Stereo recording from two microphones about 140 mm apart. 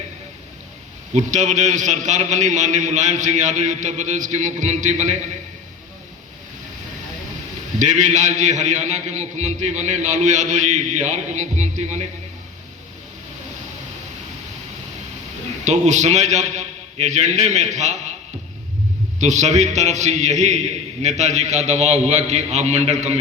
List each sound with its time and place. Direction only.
1.1 s a man's voice: 60° right (ahead or behind)
7.8 s a man's voice: 60° right (ahead or behind)
15.6 s a man's voice: 55° right (ahead or behind)
19.2 s a man's voice: 55° right (ahead or behind)